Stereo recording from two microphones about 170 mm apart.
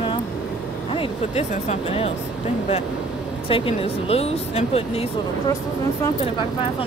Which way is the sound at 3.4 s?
35° left (ahead or behind).